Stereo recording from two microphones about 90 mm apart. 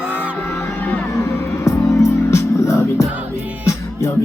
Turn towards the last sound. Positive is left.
turn(degrees=30)  # may be behind; listen again after turning